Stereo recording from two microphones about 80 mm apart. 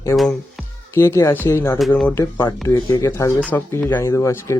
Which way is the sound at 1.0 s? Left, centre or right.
Left.